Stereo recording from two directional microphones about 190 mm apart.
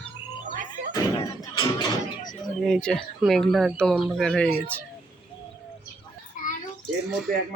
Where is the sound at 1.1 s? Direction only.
20° left (ahead or behind).